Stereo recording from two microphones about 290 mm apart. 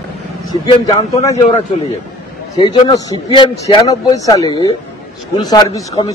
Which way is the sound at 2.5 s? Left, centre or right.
Centre.